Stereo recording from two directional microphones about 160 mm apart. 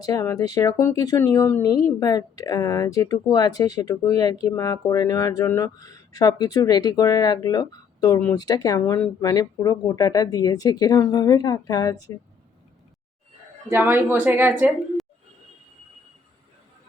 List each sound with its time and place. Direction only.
0.0 s speech: 20° left (ahead or behind)
13.7 s a woman's voice: 15° right (ahead or behind)